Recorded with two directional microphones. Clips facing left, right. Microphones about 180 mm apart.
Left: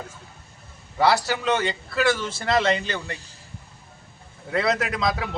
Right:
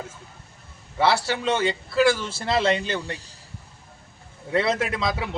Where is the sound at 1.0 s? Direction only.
30° right (ahead or behind).